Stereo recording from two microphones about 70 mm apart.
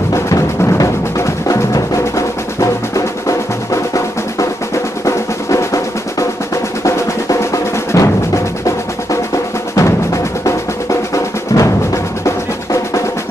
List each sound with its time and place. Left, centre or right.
0.1 s music: left
5.0 s drum roll: left
9.8 s percussion: left